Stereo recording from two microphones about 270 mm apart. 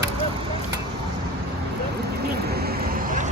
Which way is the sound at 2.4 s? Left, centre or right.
Right.